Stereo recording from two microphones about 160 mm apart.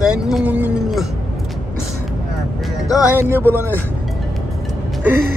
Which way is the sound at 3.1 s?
15° right (ahead or behind).